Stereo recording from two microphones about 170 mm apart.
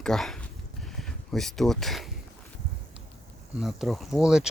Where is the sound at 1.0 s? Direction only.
Centre (ahead or behind).